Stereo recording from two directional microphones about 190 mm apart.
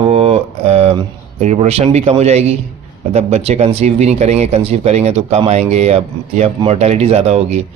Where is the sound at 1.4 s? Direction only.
35° right (ahead or behind).